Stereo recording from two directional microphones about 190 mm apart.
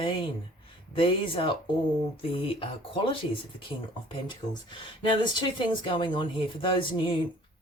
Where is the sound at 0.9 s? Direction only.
25° left (ahead or behind).